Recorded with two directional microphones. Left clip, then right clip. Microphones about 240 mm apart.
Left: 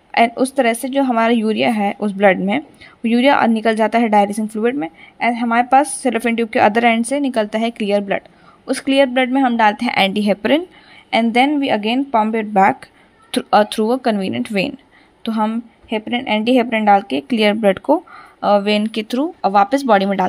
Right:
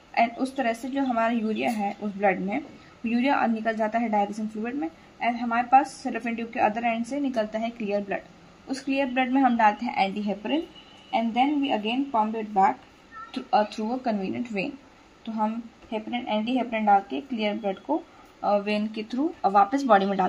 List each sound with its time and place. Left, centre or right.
0.1 s speech: left